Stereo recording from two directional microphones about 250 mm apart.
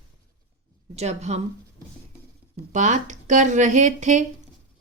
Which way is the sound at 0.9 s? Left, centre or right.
Right.